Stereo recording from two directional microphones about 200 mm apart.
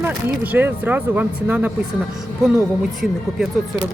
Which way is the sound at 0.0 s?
10° right (ahead or behind).